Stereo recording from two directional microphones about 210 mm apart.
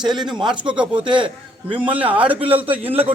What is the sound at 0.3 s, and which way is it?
A man's voice, 20° right (ahead or behind).